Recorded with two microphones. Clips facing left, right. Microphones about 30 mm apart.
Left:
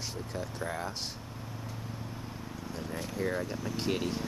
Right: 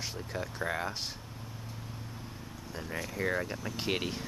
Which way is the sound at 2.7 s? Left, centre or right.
Right.